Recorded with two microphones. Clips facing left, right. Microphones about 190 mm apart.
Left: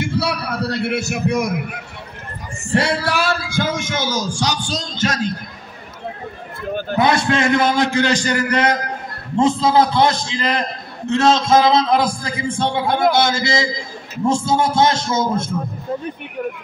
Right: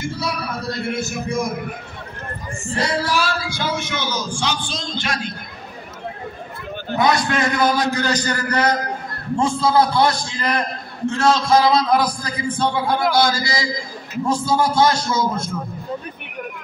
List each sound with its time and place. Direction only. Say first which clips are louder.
0.0 s a sound: left 4 dB; 70° left (ahead or behind)
2.7 s speech: left 3 dB; 65° left (ahead or behind); by 5.3 s 40° left (ahead or behind)
7.0 s a man's voice: left 2 dB; 25° left (ahead or behind)